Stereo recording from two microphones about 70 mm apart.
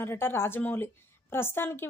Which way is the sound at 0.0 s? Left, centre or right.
Left.